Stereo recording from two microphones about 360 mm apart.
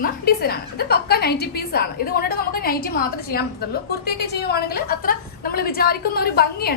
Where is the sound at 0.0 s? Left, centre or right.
Left.